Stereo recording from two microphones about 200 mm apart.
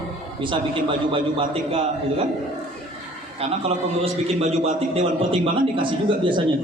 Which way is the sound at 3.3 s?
30° right (ahead or behind).